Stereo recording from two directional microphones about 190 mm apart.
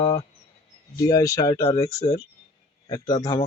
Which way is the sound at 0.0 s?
15° left (ahead or behind).